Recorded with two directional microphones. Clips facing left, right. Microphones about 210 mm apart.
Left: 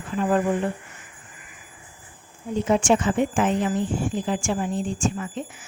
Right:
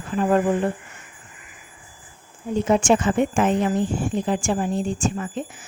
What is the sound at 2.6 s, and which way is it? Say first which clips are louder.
Speech: right 1 dB; 45° right (ahead or behind).